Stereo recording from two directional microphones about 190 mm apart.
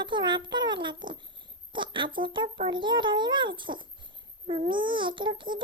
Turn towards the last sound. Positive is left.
turn(degrees=-25)  # may be behind; listen again after turning